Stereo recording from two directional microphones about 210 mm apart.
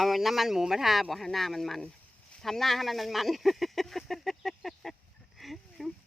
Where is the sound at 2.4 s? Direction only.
Centre (ahead or behind).